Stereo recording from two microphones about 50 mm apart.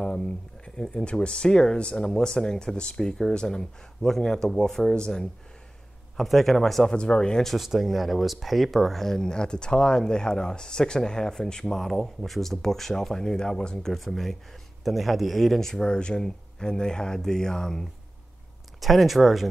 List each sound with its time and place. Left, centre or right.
0.7 s a man's voice: centre
6.9 s speech: centre
7.4 s speech: centre
18.8 s a man's voice: centre